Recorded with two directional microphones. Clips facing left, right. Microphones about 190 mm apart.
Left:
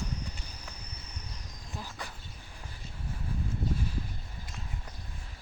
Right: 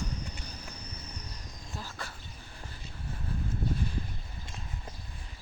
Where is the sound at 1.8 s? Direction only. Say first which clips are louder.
Even; 15° left (ahead or behind).